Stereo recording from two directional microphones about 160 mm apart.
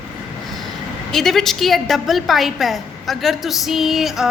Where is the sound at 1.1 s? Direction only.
Centre (ahead or behind).